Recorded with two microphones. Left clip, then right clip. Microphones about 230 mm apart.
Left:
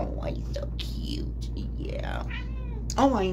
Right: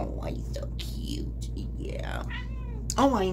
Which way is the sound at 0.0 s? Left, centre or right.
Centre.